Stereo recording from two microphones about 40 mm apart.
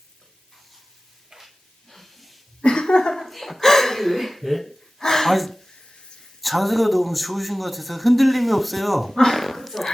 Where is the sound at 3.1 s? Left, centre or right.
Centre.